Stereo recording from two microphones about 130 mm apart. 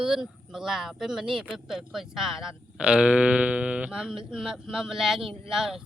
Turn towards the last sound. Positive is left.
turn(degrees=-5)  # may be behind; listen again after turning